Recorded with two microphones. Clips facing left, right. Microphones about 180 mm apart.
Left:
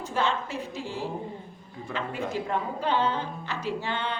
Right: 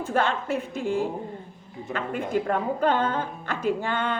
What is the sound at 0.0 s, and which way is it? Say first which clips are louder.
Speech: right 3 dB; 55° right (ahead or behind).